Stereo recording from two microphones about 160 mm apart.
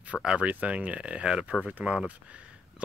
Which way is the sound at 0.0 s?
5° right (ahead or behind).